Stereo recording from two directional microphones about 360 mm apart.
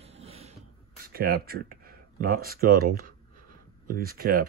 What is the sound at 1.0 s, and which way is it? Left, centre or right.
Speech, right.